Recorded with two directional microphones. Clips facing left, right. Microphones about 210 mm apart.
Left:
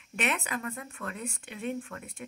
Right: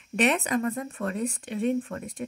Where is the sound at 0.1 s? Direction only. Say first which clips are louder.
Right 8 dB; 35° right (ahead or behind).